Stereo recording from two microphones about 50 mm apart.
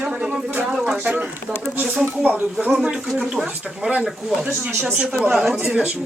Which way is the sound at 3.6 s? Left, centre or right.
Centre.